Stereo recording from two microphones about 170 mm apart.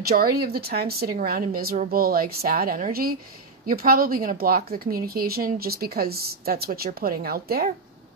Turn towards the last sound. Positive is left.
turn(degrees=-65)  # may be behind; listen again after turning